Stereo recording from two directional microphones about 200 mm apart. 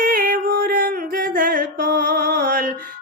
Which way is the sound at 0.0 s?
45° right (ahead or behind).